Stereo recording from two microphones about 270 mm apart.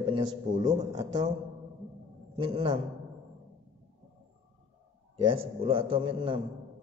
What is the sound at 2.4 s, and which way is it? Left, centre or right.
Speech, right.